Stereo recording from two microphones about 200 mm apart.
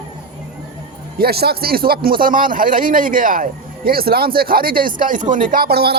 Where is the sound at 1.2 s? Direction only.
50° right (ahead or behind).